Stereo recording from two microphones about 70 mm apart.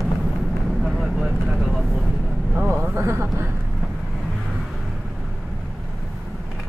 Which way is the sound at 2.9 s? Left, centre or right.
Right.